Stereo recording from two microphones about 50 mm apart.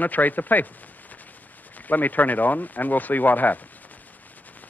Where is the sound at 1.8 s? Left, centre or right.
Left.